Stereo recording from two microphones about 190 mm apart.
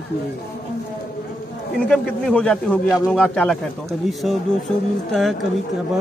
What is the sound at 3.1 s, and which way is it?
A man's voice, 5° left (ahead or behind).